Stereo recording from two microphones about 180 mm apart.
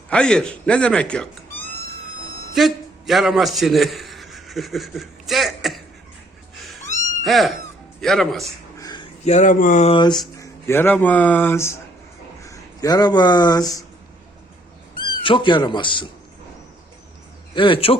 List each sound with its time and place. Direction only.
0.1 s a man's voice: 5° left (ahead or behind)
7.2 s cat: centre (ahead or behind)
8.0 s speech: centre (ahead or behind)
8.8 s a sound: 25° left (ahead or behind)
9.2 s speech: 40° left (ahead or behind)
9.9 s speech: 25° left (ahead or behind)
15.0 s speech: 25° left (ahead or behind)
17.5 s speech: 30° left (ahead or behind)